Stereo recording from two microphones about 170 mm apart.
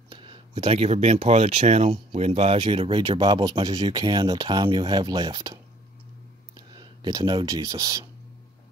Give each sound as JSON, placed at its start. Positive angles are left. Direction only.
{"t": 0.1, "sound": "speech", "side_deg": -30}